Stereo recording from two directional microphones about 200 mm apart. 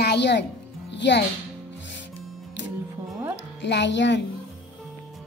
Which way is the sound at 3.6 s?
60° left (ahead or behind).